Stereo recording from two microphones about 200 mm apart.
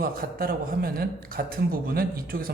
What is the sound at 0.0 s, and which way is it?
Speech, 45° right (ahead or behind).